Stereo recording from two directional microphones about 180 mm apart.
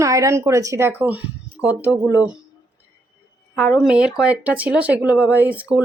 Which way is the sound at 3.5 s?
10° left (ahead or behind).